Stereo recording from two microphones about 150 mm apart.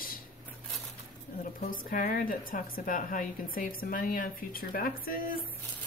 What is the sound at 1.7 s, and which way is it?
A woman's voice, 65° left (ahead or behind).